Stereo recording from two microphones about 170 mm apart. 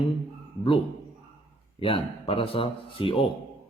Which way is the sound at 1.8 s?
30° left (ahead or behind).